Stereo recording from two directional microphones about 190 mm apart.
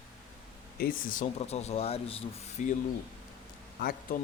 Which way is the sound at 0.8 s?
45° left (ahead or behind).